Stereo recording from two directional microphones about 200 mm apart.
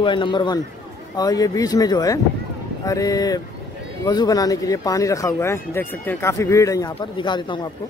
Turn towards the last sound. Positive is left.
turn(degrees=25)  # may be behind; listen again after turning